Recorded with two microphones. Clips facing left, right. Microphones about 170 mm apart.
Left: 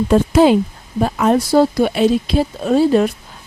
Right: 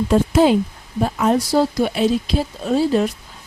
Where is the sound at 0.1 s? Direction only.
70° left (ahead or behind).